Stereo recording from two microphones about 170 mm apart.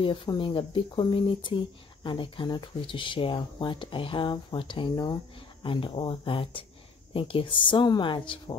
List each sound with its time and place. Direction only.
0.0 s speech: 30° left (ahead or behind)